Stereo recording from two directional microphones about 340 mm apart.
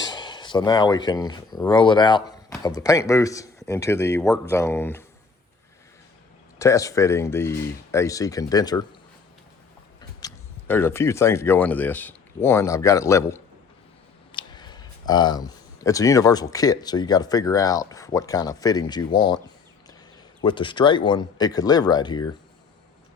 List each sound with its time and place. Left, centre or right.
0.0 s speech: centre
6.6 s speech: centre
10.0 s speech: centre
20.4 s speech: centre